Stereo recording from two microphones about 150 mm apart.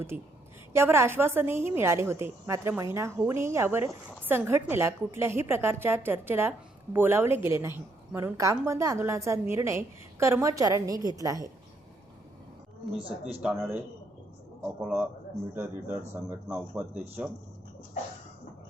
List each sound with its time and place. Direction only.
0.1 s a woman's voice: 65° right (ahead or behind)
0.7 s a woman's voice: 15° right (ahead or behind)
12.9 s speech: 35° right (ahead or behind)
13.4 s a woman's voice: 10° right (ahead or behind)